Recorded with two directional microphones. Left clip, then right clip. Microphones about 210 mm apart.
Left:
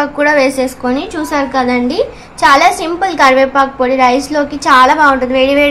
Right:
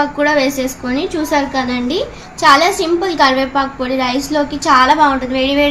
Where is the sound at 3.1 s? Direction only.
20° left (ahead or behind).